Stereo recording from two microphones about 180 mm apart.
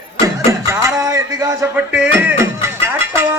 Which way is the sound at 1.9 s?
10° right (ahead or behind).